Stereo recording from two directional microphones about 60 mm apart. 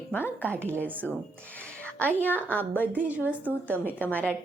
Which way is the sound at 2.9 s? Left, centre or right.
Right.